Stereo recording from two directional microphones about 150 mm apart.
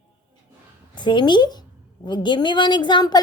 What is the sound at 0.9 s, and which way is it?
A woman's voice, 30° left (ahead or behind).